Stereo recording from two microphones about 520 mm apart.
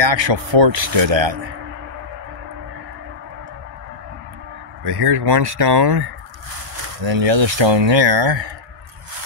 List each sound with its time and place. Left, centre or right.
0.0 s speech: right
4.8 s speech: right
7.1 s speech: right